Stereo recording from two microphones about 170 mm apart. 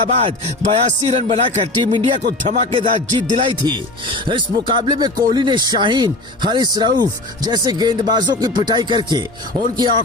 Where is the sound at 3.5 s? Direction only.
30° right (ahead or behind).